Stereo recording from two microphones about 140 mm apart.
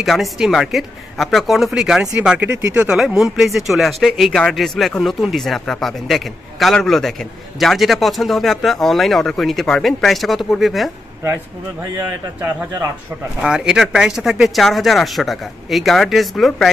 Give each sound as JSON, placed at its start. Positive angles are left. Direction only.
{"t": 0.0, "sound": "speech", "side_deg": 0}
{"t": 13.4, "sound": "speech", "side_deg": -5}